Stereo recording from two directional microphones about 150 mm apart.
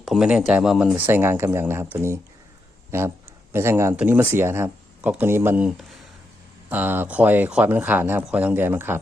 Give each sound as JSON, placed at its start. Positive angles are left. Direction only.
{"t": 0.0, "sound": "speech", "side_deg": -5}
{"t": 3.5, "sound": "speech", "side_deg": -15}